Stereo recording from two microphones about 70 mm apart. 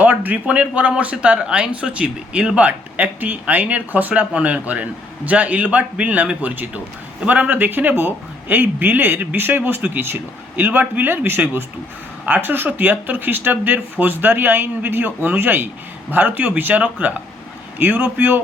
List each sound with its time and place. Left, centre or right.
0.0 s speech: right